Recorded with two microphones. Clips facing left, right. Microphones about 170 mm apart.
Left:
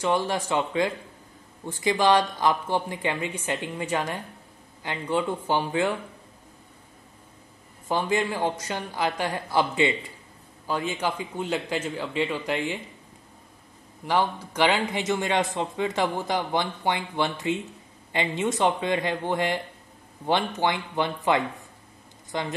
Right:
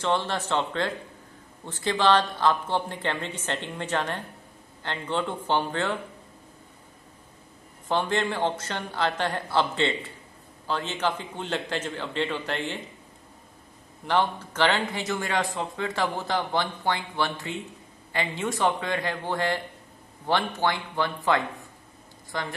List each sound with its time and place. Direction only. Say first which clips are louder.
0.0 s a woman's voice: left 2 dB; 10° left (ahead or behind)
7.9 s a woman's voice: left 1 dB; 10° left (ahead or behind)
14.0 s a woman's voice: even; 10° left (ahead or behind)